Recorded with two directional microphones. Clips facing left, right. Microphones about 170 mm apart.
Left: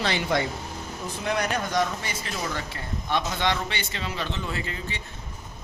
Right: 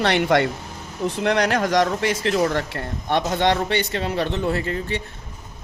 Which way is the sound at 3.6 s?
55° right (ahead or behind).